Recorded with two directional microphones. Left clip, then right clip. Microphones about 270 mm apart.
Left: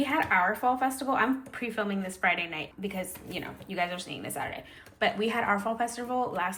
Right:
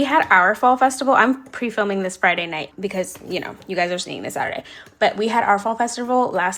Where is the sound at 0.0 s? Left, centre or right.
Centre.